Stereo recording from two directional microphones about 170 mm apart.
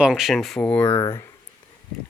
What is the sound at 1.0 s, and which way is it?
Speech, 25° left (ahead or behind).